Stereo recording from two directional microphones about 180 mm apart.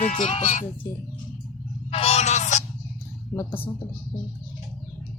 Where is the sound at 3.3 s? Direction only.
15° left (ahead or behind).